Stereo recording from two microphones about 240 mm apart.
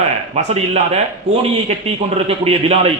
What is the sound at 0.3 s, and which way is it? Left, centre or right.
A man's voice, right.